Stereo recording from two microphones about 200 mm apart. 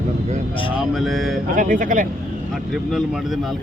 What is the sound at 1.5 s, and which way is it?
Speech, 40° right (ahead or behind).